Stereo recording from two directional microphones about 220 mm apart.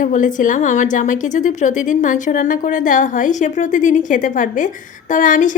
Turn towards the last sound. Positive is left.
turn(degrees=35)  # may be behind; listen again after turning